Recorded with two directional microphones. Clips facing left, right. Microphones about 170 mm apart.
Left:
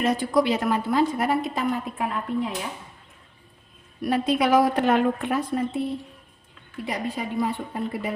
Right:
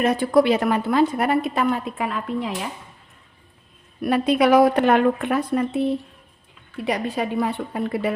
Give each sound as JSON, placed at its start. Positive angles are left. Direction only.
{"t": 0.0, "sound": "a woman's voice", "side_deg": -60}
{"t": 4.0, "sound": "a woman's voice", "side_deg": -65}